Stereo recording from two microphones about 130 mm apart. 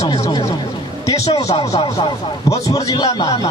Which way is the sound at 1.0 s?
30° left (ahead or behind).